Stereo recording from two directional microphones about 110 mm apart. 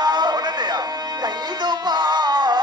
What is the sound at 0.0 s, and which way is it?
Music, 40° right (ahead or behind).